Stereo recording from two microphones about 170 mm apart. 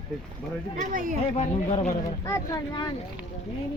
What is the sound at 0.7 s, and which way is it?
Speech, 50° right (ahead or behind).